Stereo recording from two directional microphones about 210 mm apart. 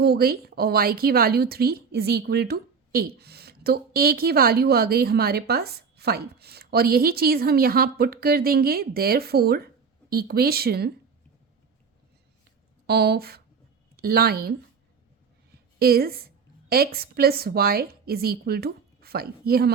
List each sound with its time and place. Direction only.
0.0 s a woman's voice: 45° right (ahead or behind)
12.9 s a woman's voice: 50° right (ahead or behind)
15.8 s a woman's voice: 45° right (ahead or behind)